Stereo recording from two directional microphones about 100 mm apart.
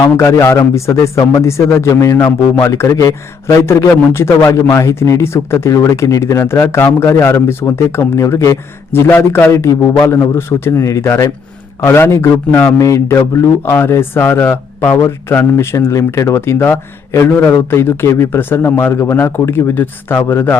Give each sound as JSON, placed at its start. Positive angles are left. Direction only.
{"t": 0.2, "sound": "speech", "side_deg": 25}